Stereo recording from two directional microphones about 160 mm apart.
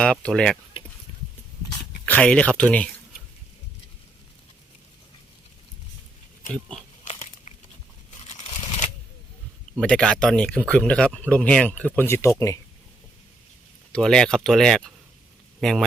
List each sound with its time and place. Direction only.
0.0 s speech: 5° left (ahead or behind)
2.0 s speech: 10° left (ahead or behind)
7.0 s crumpling: 40° left (ahead or behind)
9.8 s speech: 5° left (ahead or behind)
13.9 s speech: 5° left (ahead or behind)